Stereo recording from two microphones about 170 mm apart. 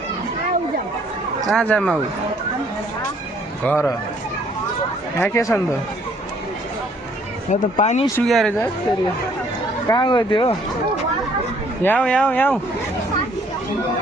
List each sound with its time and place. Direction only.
1.5 s speech: 5° left (ahead or behind)
3.7 s speech: 15° left (ahead or behind)
5.2 s speech: 15° left (ahead or behind)
7.5 s speech: 45° left (ahead or behind)
8.2 s speech: centre (ahead or behind)
9.9 s speech: 25° left (ahead or behind)
11.8 s speech: 10° left (ahead or behind)